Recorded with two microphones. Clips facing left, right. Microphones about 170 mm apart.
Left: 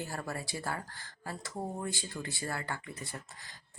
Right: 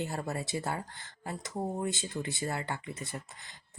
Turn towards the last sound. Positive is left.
turn(degrees=-20)  # may be behind; listen again after turning